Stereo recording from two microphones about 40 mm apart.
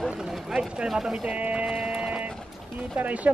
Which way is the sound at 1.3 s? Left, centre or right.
Right.